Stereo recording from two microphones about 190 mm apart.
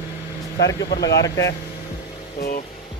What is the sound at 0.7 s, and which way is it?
Speech, 65° left (ahead or behind).